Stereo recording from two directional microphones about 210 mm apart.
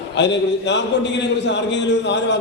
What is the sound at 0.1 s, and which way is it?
A man's voice, 55° left (ahead or behind).